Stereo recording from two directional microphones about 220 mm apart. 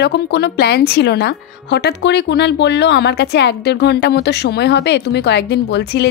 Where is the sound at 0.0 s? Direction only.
50° left (ahead or behind).